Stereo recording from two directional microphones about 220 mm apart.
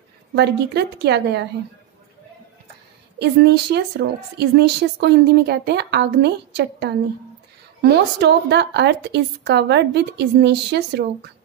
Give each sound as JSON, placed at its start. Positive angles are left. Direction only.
{"t": 0.4, "sound": "speech", "side_deg": -50}
{"t": 3.2, "sound": "speech", "side_deg": -50}